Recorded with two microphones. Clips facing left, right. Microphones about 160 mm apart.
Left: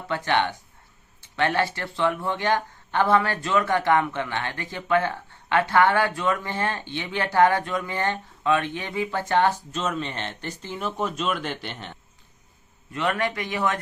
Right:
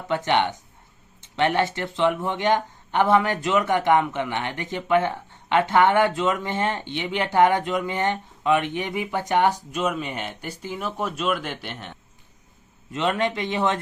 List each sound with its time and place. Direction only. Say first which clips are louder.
0.1 s speech: right 2 dB; 20° right (ahead or behind); by 11.9 s centre (ahead or behind)
12.9 s speech: right 2 dB; 20° right (ahead or behind)